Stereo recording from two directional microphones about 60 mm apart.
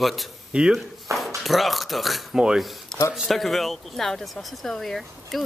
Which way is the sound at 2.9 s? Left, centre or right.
Centre.